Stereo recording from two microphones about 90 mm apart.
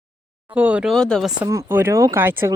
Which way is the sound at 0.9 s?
5° left (ahead or behind).